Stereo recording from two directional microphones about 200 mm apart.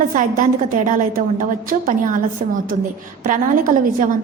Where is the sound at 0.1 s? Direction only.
40° right (ahead or behind).